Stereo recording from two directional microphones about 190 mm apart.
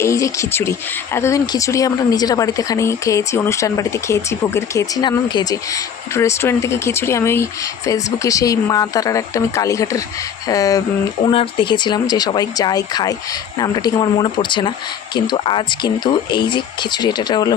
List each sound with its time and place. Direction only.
0.0 s speech: 15° left (ahead or behind)